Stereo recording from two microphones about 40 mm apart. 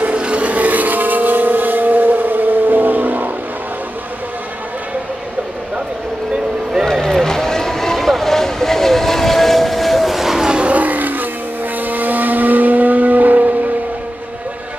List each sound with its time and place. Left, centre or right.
0.2 s vehicle: right
6.9 s vehicle: centre
10.5 s vehicle: right